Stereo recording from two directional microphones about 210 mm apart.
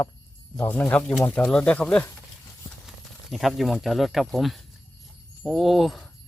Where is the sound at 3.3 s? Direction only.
Centre (ahead or behind).